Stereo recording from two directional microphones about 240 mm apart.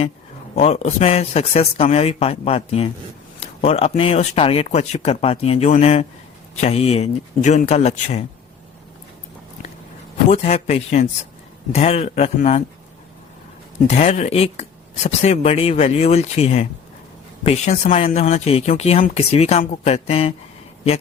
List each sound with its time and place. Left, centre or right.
0.5 s speech: left
10.2 s speech: left
13.8 s speech: left